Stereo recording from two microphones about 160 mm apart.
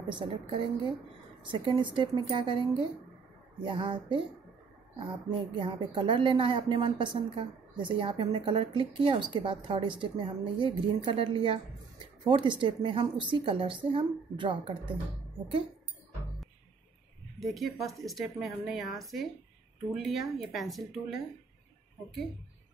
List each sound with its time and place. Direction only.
0.1 s a woman's voice: 30° right (ahead or behind)
3.6 s speech: 30° right (ahead or behind)
5.5 s a woman's voice: 30° right (ahead or behind)
17.4 s speech: centre (ahead or behind)